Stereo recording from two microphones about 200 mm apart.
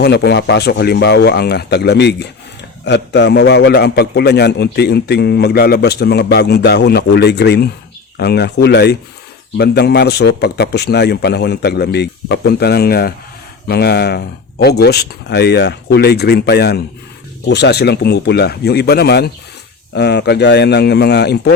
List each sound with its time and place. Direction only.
0.0 s a man's voice: 55° left (ahead or behind)